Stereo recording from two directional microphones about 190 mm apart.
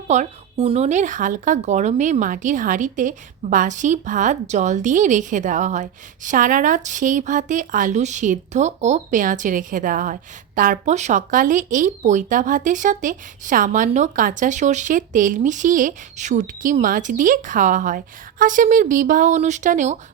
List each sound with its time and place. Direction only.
0.1 s speech: 35° right (ahead or behind)